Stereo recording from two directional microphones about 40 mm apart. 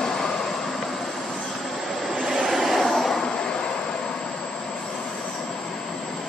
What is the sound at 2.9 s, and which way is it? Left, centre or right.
Vehicle, centre.